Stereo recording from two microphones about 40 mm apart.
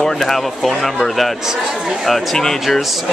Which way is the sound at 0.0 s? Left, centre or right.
Centre.